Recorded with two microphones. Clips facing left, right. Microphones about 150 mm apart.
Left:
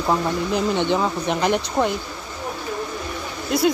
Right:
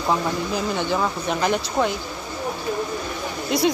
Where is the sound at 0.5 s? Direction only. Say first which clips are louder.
Left 4 dB; 20° left (ahead or behind).